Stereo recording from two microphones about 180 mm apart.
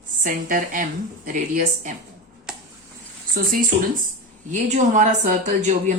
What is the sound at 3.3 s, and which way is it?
A woman's voice, 50° right (ahead or behind).